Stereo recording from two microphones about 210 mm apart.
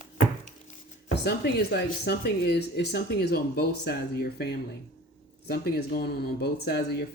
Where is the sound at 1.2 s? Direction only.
50° left (ahead or behind).